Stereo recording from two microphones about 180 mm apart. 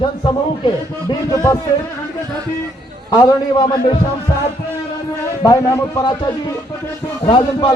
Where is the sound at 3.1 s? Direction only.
25° left (ahead or behind).